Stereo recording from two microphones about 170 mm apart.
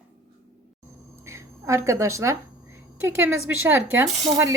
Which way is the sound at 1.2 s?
15° right (ahead or behind).